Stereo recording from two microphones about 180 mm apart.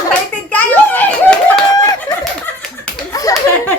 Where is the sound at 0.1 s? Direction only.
10° left (ahead or behind).